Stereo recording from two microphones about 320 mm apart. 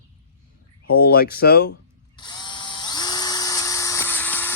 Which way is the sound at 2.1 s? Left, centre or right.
Centre.